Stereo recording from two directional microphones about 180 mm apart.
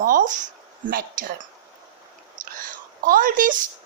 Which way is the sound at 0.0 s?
45° right (ahead or behind).